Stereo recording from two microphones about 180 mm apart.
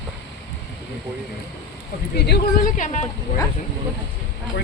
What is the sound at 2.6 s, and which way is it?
Speech, 45° left (ahead or behind).